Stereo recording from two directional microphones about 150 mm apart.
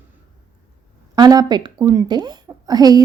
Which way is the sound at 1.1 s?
25° right (ahead or behind).